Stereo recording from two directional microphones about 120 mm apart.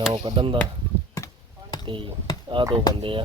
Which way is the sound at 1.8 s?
45° right (ahead or behind).